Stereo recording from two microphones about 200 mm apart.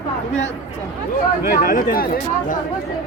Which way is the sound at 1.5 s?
45° left (ahead or behind).